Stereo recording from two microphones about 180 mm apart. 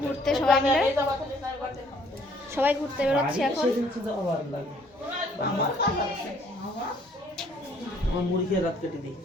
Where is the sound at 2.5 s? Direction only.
10° right (ahead or behind).